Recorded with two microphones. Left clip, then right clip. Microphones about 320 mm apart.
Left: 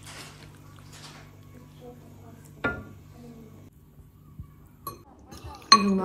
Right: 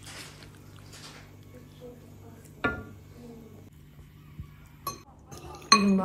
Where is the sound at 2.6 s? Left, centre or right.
Centre.